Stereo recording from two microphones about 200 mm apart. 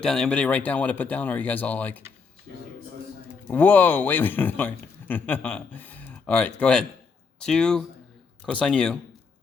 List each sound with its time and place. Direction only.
0.0 s speech: 5° left (ahead or behind)
3.5 s speech: 10° left (ahead or behind)